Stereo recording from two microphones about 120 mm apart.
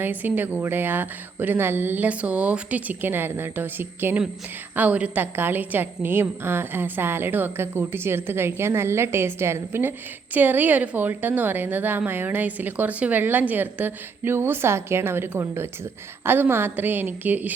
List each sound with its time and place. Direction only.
0.0 s a woman's voice: 15° right (ahead or behind)